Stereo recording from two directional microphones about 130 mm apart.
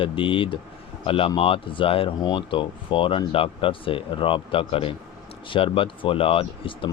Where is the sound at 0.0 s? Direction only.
40° left (ahead or behind).